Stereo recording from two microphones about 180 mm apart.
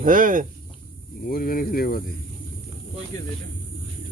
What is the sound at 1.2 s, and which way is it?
Speech, 55° left (ahead or behind).